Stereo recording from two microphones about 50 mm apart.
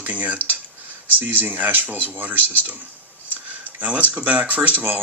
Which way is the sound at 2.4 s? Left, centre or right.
Left.